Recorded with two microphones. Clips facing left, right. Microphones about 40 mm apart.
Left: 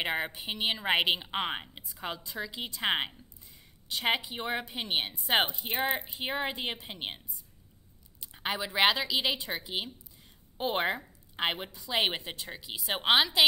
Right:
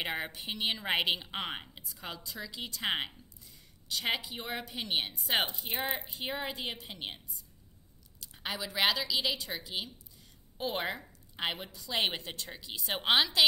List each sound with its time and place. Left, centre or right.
0.0 s a woman's voice: centre
6.0 s a woman's voice: centre
8.2 s a woman's voice: left